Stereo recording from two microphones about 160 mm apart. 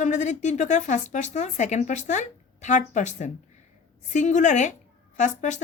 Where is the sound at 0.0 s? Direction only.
50° left (ahead or behind).